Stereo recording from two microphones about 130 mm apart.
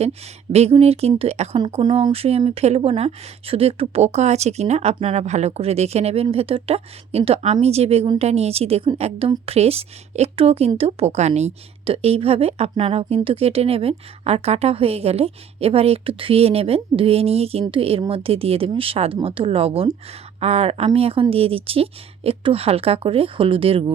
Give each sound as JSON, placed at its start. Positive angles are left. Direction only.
{"t": 0.0, "sound": "a woman's voice", "side_deg": -55}
{"t": 1.5, "sound": "a woman's voice", "side_deg": -40}